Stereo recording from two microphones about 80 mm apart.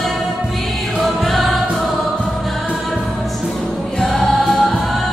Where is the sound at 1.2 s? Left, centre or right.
Centre.